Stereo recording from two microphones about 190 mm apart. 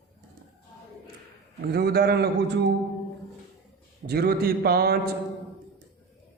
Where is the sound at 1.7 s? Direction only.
55° right (ahead or behind).